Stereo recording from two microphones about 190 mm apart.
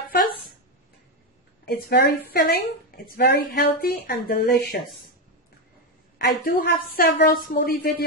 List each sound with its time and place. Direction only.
1.7 s a woman's voice: 50° left (ahead or behind)
6.1 s a woman's voice: 60° left (ahead or behind)